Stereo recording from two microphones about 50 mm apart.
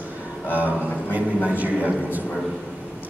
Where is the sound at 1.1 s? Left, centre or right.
Right.